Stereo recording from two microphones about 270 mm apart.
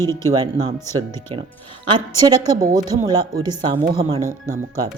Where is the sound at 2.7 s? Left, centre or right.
Centre.